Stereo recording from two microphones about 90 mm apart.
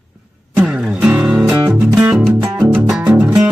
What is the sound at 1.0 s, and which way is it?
Music, 10° right (ahead or behind).